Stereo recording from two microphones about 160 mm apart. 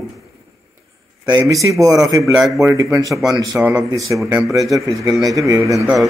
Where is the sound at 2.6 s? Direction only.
20° right (ahead or behind).